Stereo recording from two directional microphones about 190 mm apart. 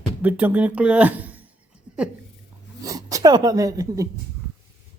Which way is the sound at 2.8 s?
20° right (ahead or behind).